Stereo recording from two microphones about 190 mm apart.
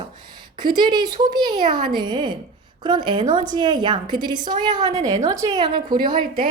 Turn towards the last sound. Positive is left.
turn(degrees=-25)  # may be behind; listen again after turning